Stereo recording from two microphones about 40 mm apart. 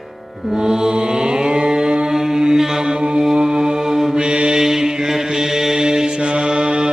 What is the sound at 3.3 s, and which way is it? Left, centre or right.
Mantra, centre.